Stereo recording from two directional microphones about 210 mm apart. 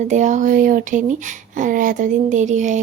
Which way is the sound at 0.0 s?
35° right (ahead or behind).